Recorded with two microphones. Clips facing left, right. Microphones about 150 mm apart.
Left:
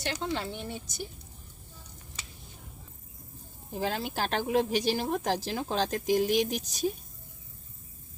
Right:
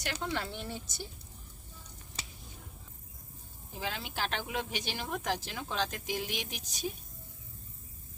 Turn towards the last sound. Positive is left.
turn(degrees=40)  # may be behind; listen again after turning